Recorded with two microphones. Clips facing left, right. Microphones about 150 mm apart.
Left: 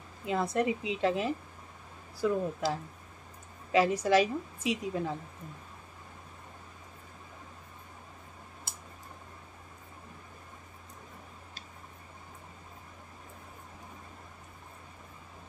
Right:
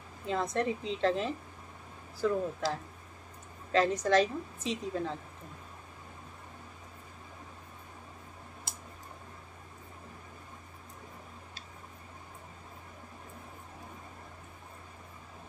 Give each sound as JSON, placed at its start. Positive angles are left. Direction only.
{"t": 0.3, "sound": "a woman's voice", "side_deg": 5}